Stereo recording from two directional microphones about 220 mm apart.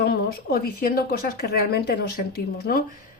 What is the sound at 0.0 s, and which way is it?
Speech, 45° left (ahead or behind).